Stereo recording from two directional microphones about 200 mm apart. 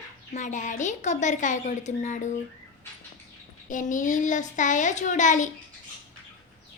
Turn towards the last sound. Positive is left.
turn(degrees=40)  # may be behind; listen again after turning